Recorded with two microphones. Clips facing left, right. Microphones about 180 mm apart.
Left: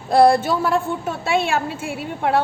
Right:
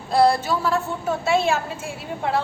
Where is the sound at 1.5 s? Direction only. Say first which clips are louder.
Left 1 dB; 60° left (ahead or behind).